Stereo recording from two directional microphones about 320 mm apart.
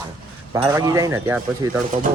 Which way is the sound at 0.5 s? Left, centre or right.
Centre.